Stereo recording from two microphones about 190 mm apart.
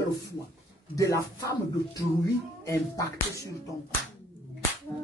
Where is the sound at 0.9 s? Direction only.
15° left (ahead or behind).